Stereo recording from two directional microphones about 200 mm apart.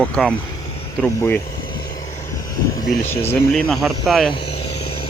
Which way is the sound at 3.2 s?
10° left (ahead or behind).